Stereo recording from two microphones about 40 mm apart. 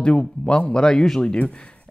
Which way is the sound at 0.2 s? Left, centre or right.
Left.